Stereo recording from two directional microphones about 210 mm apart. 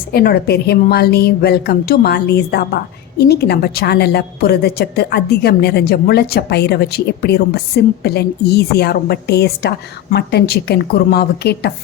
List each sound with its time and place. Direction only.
0.1 s a woman's voice: 45° left (ahead or behind)